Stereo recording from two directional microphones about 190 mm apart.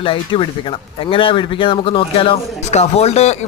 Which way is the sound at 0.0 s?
25° left (ahead or behind).